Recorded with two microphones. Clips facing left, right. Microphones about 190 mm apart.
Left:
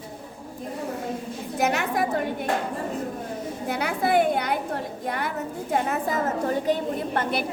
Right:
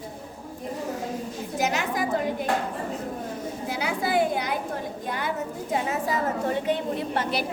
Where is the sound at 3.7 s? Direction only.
60° left (ahead or behind).